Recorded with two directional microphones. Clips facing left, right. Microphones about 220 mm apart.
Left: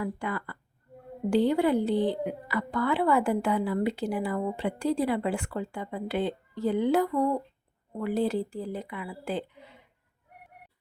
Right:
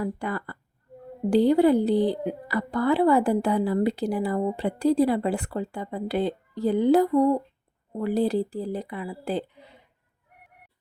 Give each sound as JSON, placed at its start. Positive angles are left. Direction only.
{"t": 0.0, "sound": "a woman's voice", "side_deg": -40}